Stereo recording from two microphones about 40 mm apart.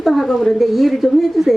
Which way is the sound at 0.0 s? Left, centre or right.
Centre.